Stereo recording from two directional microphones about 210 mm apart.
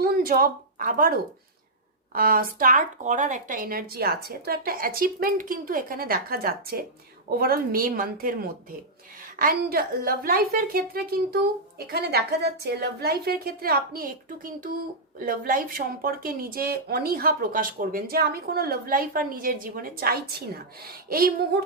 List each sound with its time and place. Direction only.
0.0 s a woman's voice: 45° right (ahead or behind)